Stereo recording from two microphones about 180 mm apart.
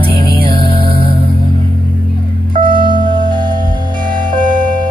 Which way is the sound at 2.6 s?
25° right (ahead or behind).